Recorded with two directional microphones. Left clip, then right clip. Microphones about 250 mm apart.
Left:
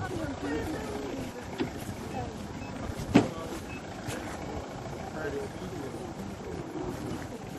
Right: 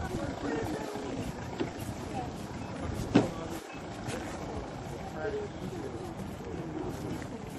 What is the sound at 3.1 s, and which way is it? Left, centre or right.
Vehicle, left.